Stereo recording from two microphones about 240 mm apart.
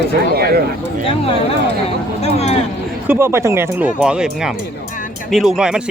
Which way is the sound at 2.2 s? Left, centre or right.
Left.